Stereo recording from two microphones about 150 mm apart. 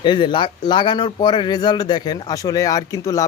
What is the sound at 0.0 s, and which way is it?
Speech, 30° left (ahead or behind).